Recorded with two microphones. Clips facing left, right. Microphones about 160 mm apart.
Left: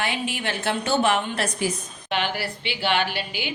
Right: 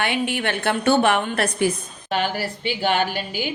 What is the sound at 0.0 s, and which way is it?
A woman's voice, 60° right (ahead or behind).